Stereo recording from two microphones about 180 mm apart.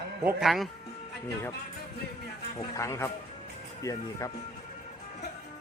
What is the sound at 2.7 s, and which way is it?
A man's voice, 15° left (ahead or behind).